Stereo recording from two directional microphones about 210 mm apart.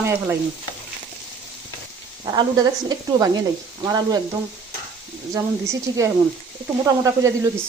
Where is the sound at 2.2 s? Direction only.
20° right (ahead or behind).